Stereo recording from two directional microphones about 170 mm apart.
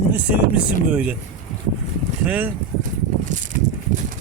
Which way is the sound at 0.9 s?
5° right (ahead or behind).